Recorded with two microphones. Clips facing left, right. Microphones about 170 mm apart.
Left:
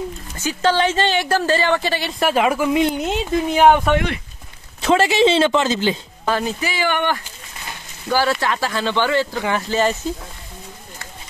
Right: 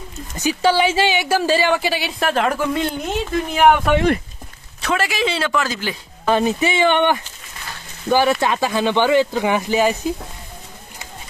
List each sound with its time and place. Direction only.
0.4 s a woman's voice: 10° right (ahead or behind); by 2.9 s 10° left (ahead or behind)
3.3 s speech: 25° left (ahead or behind)
4.8 s speech: 25° left (ahead or behind)
6.2 s a woman's voice: 20° right (ahead or behind)